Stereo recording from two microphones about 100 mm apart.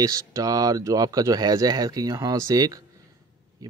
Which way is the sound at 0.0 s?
35° right (ahead or behind).